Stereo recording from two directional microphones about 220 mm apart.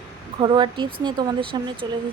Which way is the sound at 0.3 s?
20° right (ahead or behind).